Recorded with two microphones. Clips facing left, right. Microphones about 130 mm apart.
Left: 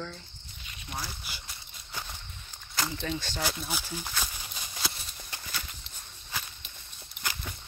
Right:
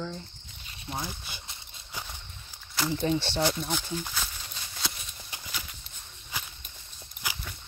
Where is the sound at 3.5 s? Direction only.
5° left (ahead or behind).